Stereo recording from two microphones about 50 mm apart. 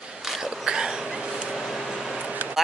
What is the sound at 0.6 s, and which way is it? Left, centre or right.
Speech, centre.